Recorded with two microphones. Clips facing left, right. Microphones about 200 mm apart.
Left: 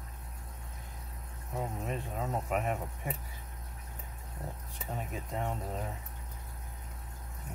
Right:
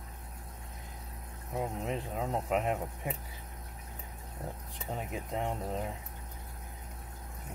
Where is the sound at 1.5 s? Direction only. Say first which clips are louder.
Right 2 dB; 15° right (ahead or behind).